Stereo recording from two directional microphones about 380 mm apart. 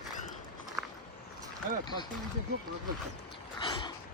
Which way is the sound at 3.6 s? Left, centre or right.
Centre.